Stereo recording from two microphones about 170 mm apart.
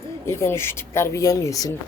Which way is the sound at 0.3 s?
15° left (ahead or behind).